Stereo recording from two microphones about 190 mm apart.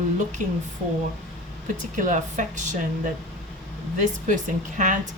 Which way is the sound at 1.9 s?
40° right (ahead or behind).